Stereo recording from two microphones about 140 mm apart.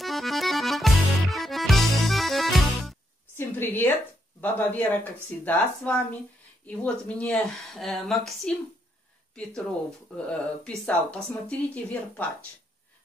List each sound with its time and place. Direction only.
0.0 s music: centre (ahead or behind)
3.3 s a sound: 15° left (ahead or behind)
4.4 s speech: 15° left (ahead or behind)
10.1 s speech: 5° left (ahead or behind)